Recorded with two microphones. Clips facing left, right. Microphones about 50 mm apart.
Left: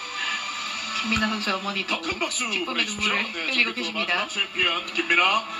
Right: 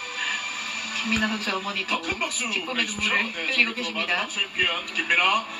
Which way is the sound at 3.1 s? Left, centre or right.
Centre.